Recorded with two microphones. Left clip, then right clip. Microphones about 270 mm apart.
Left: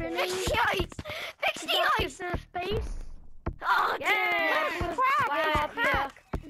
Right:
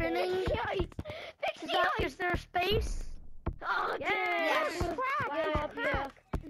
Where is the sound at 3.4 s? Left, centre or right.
Centre.